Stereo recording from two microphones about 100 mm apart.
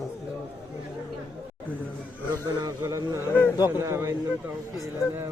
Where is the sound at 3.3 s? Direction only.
20° left (ahead or behind).